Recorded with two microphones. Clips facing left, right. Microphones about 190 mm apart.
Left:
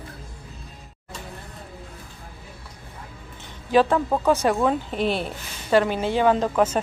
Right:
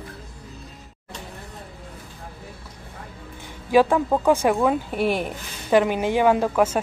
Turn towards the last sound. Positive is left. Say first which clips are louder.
# right 1 dB
turn(degrees=-10)  # may be behind; listen again after turning